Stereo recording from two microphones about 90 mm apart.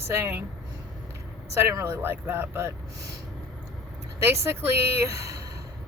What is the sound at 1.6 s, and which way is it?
Speech, 30° right (ahead or behind).